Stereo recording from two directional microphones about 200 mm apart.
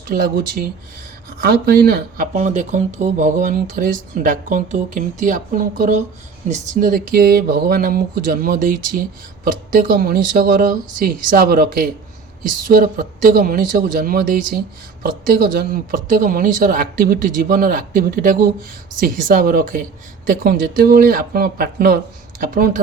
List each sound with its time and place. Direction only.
0.1 s speech: 45° right (ahead or behind)